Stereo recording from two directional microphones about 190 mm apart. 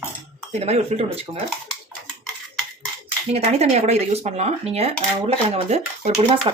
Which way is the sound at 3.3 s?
35° right (ahead or behind).